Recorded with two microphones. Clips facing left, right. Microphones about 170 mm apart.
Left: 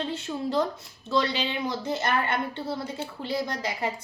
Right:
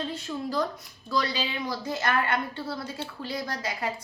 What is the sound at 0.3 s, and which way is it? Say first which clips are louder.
A woman's voice: left 3 dB; 25° left (ahead or behind).